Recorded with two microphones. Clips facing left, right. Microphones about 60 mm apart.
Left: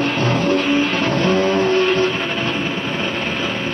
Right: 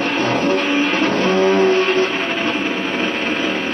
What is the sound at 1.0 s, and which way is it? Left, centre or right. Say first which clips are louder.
Music: right 1 dB; centre.